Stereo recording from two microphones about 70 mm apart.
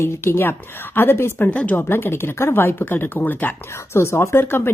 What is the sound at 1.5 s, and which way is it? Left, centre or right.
Speech, left.